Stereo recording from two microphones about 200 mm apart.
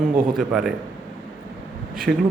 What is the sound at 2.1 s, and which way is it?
Speech, 65° right (ahead or behind).